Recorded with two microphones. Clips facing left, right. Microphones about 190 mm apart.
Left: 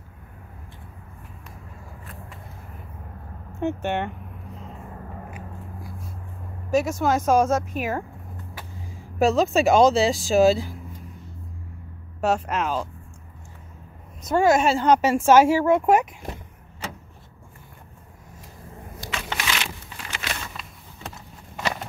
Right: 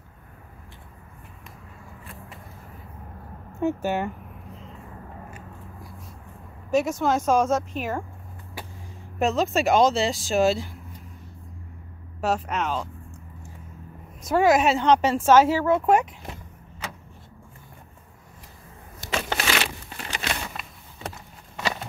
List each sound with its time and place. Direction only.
3.6 s speech: 5° right (ahead or behind)
6.7 s speech: centre (ahead or behind)
9.2 s speech: centre (ahead or behind)
12.2 s speech: centre (ahead or behind)
14.2 s a woman's voice: 5° right (ahead or behind)
19.1 s a sound: 45° right (ahead or behind)